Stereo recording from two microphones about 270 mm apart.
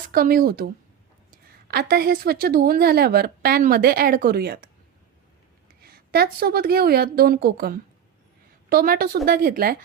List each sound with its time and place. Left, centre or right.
0.1 s a woman's voice: right
5.8 s a woman's voice: right
8.7 s a woman's voice: right